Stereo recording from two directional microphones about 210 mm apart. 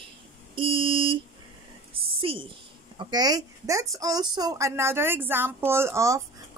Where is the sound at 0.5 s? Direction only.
25° right (ahead or behind).